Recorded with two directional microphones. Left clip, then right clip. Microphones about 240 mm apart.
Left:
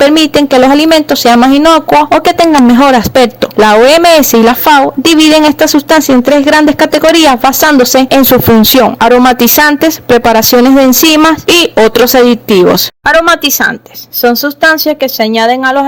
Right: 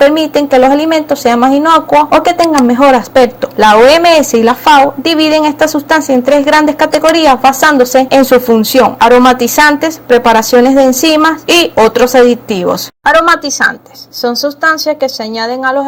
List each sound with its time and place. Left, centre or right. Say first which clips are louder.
0.0 s speech: left 2 dB; left